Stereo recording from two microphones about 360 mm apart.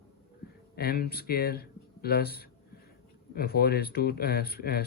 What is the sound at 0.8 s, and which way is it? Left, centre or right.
Speech, left.